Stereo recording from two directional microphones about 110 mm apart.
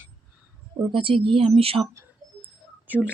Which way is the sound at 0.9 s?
55° right (ahead or behind).